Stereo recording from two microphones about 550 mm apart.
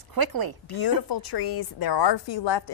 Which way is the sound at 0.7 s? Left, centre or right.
Left.